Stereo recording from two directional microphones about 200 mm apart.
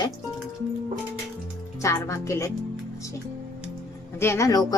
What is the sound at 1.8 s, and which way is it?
Speech, 15° left (ahead or behind).